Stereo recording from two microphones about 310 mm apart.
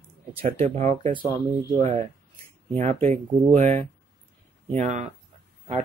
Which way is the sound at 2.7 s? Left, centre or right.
Right.